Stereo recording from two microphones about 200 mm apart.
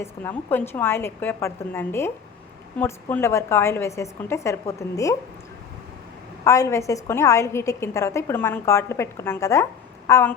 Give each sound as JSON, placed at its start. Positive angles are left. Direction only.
{"t": 0.0, "sound": "a woman's voice", "side_deg": 10}
{"t": 6.4, "sound": "a woman's voice", "side_deg": 15}